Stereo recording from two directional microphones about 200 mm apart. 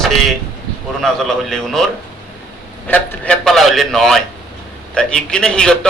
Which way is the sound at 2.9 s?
5° left (ahead or behind).